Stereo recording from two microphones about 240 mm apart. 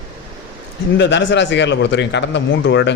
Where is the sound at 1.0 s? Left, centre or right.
Left.